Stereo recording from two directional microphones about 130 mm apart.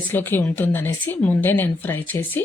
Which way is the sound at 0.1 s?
15° left (ahead or behind).